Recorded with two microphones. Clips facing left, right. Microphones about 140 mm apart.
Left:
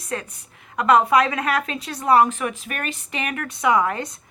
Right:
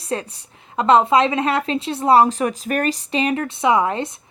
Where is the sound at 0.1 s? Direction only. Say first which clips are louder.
Right 4 dB; 30° right (ahead or behind).